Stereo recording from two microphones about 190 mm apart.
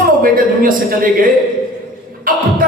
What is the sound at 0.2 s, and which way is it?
Speech, 50° right (ahead or behind).